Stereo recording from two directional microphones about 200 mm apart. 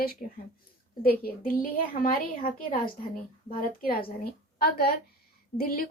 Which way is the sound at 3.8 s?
45° left (ahead or behind).